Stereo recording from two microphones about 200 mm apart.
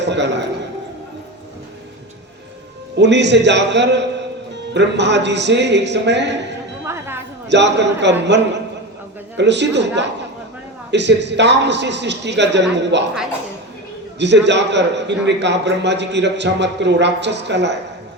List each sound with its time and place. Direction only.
0.0 s a man's voice: 60° right (ahead or behind)
3.0 s a man's voice: 60° right (ahead or behind)
6.8 s music: 15° right (ahead or behind)
7.4 s a man's voice: 60° right (ahead or behind)
14.2 s a man's voice: 60° right (ahead or behind)